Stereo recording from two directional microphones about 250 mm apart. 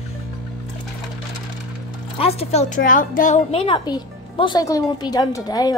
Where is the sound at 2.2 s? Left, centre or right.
Left.